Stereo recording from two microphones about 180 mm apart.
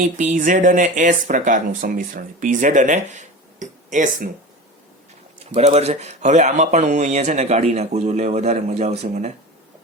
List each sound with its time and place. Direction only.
0.0 s speech: 45° right (ahead or behind)
5.5 s speech: 35° right (ahead or behind)